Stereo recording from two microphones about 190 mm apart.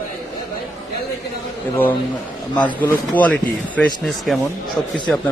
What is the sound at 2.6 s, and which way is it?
Speech, 10° left (ahead or behind).